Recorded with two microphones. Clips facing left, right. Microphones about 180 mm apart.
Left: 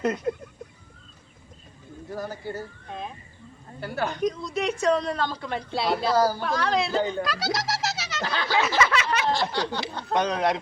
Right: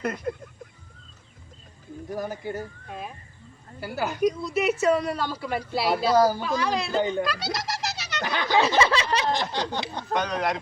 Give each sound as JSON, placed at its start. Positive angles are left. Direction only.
{"t": 2.0, "sound": "a woman's voice", "side_deg": -15}
{"t": 7.1, "sound": "a sound", "side_deg": 0}
{"t": 8.2, "sound": "a woman's voice", "side_deg": -15}
{"t": 8.6, "sound": "a sound", "side_deg": -30}
{"t": 9.3, "sound": "a woman's voice", "side_deg": -20}
{"t": 10.1, "sound": "speech", "side_deg": 25}